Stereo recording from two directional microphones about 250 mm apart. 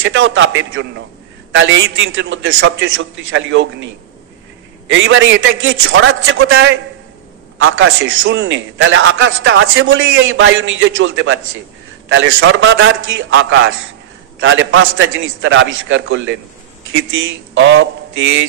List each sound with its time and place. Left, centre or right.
0.0 s a man's voice: right